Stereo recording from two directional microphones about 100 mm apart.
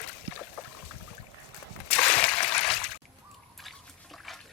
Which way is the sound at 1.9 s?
15° left (ahead or behind).